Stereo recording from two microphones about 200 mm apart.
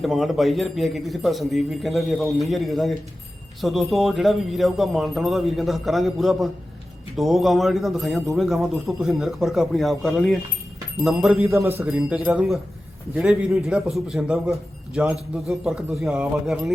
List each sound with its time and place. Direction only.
0.0 s a man's voice: centre (ahead or behind)